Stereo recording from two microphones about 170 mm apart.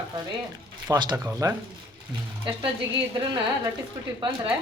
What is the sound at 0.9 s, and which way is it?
Speech, 25° right (ahead or behind).